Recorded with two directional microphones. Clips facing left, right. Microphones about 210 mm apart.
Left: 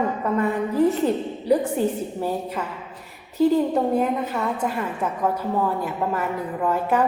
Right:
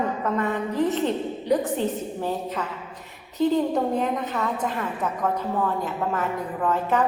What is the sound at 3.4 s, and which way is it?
A woman's voice, 5° left (ahead or behind).